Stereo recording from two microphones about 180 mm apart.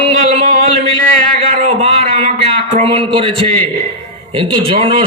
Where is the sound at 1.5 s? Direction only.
40° right (ahead or behind).